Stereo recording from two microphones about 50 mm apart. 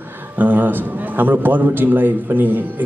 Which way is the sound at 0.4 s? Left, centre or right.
Right.